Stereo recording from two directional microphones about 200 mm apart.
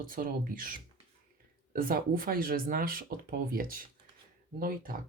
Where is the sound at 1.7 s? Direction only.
45° right (ahead or behind).